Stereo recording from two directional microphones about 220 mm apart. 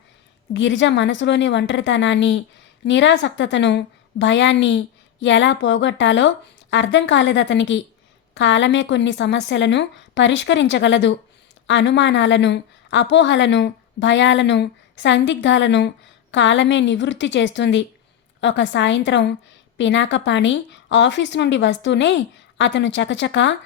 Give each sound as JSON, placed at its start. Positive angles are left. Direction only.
{"t": 0.5, "sound": "a woman's voice", "side_deg": 55}